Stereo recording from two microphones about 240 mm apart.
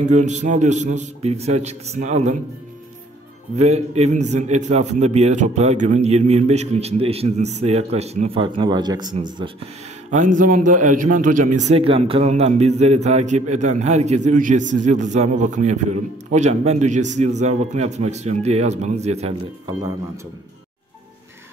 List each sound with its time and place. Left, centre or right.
0.0 s a man's voice: right
3.5 s a man's voice: right
10.1 s a man's voice: right